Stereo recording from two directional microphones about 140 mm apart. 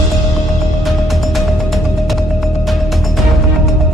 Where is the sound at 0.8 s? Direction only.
Centre (ahead or behind).